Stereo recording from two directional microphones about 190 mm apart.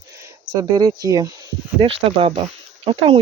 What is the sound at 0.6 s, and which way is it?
Speech, 25° right (ahead or behind).